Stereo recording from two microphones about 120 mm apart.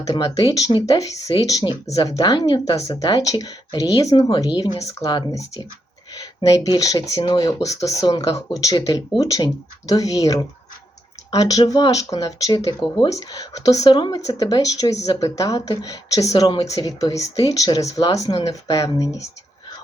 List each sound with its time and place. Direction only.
0.0 s speech: 30° left (ahead or behind)
7.2 s speech: 45° left (ahead or behind)
7.4 s speech: 30° left (ahead or behind)